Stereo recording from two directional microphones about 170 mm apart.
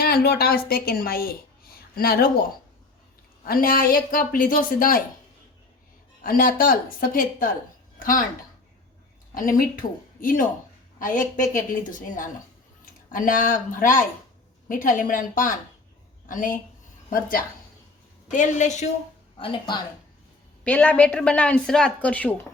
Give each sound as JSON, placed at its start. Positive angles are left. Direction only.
{"t": 0.0, "sound": "speech", "side_deg": 65}
{"t": 3.4, "sound": "speech", "side_deg": 60}
{"t": 6.2, "sound": "speech", "side_deg": 55}
{"t": 9.3, "sound": "speech", "side_deg": 55}
{"t": 11.5, "sound": "speech", "side_deg": 50}
{"t": 19.4, "sound": "a woman's voice", "side_deg": 30}
{"t": 20.7, "sound": "a woman's voice", "side_deg": 10}